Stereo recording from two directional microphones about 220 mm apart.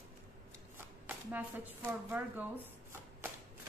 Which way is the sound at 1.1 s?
10° right (ahead or behind).